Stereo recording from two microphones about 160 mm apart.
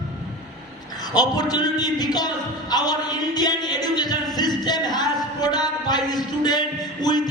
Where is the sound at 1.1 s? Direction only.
25° left (ahead or behind).